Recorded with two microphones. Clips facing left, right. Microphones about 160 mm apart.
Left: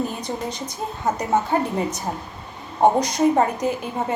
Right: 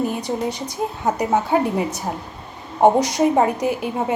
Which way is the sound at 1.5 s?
10° right (ahead or behind).